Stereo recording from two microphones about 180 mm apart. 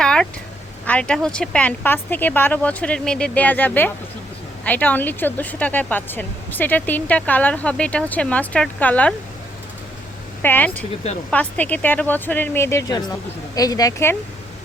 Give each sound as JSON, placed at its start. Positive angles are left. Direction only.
{"t": 0.0, "sound": "a sound", "side_deg": 5}
{"t": 0.9, "sound": "speech", "side_deg": 5}
{"t": 10.4, "sound": "a woman's voice", "side_deg": 10}